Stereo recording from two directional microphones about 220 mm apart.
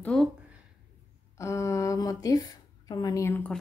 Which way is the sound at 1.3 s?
15° left (ahead or behind).